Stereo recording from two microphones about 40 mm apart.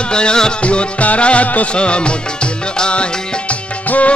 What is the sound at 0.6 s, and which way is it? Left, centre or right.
Music, left.